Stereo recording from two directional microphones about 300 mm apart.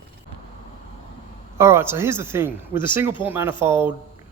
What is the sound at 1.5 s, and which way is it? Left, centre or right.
Speech, centre.